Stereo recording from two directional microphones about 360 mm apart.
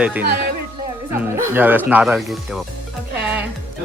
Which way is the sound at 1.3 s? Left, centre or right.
Centre.